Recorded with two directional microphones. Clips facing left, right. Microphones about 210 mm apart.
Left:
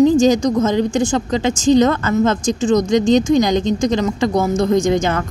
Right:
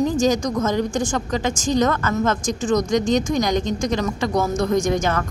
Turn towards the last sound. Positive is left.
turn(degrees=25)  # may be behind; listen again after turning